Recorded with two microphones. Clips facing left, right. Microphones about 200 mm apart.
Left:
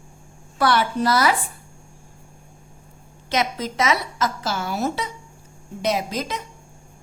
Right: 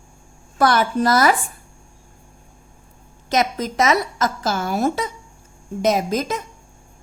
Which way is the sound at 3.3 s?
45° right (ahead or behind).